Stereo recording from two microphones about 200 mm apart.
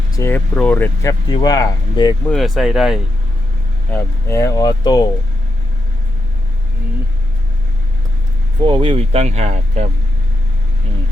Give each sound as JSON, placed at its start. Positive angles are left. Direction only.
{"t": 0.2, "sound": "speech", "side_deg": 10}
{"t": 1.3, "sound": "speech", "side_deg": 20}
{"t": 2.3, "sound": "speech", "side_deg": 0}
{"t": 3.9, "sound": "speech", "side_deg": 15}
{"t": 8.6, "sound": "speech", "side_deg": -25}